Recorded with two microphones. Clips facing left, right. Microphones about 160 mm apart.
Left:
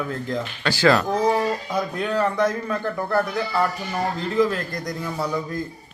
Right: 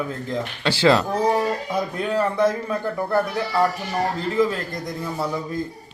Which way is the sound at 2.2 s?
5° right (ahead or behind).